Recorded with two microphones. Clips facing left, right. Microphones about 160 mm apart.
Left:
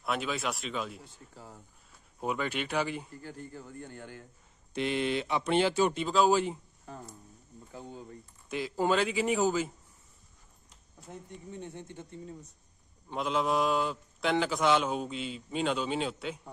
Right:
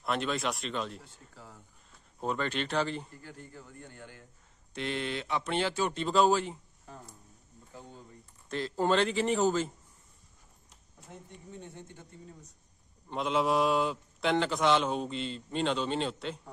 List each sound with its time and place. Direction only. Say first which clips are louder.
0.0 s speech: right 1 dB; 5° left (ahead or behind)
1.3 s speech: left 2 dB; 30° left (ahead or behind)
2.1 s speech: even; 10° left (ahead or behind)
3.3 s a man's voice: left 4 dB; 40° left (ahead or behind)
4.7 s speech: left 4 dB; 10° left (ahead or behind)
8.5 s speech: even; 10° left (ahead or behind)
13.1 s speech: right 1 dB; centre (ahead or behind)